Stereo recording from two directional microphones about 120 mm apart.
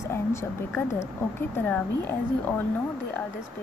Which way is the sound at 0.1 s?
20° left (ahead or behind).